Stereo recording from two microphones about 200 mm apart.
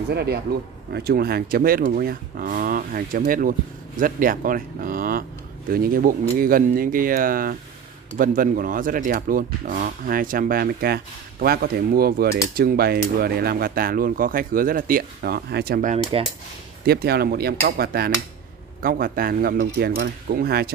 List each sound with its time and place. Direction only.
0.1 s speech: 55° right (ahead or behind)